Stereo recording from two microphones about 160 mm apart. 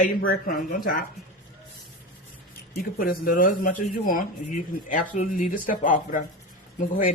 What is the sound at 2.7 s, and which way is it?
Speech, 65° left (ahead or behind).